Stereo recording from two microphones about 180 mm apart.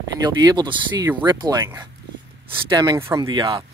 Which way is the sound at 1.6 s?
15° right (ahead or behind).